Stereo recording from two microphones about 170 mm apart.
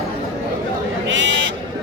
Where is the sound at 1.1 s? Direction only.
90° right.